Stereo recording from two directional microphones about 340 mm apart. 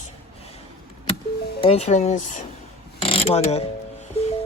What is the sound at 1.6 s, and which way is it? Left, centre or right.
Speech, centre.